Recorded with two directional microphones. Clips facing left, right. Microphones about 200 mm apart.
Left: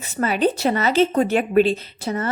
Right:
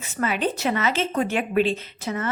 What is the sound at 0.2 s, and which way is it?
Speech, 35° left (ahead or behind).